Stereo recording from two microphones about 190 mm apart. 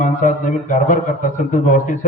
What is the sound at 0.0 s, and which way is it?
A man's voice, 40° left (ahead or behind).